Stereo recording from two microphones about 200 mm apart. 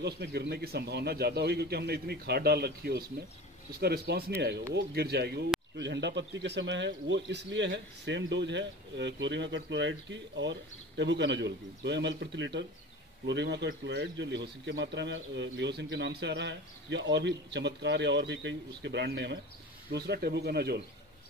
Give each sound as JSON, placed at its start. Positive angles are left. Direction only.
{"t": 0.0, "sound": "a man's voice", "side_deg": -55}